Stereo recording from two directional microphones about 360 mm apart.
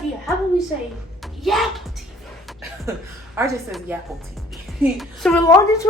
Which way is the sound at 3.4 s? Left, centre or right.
Centre.